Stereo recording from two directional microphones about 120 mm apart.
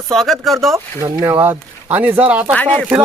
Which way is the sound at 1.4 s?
15° right (ahead or behind).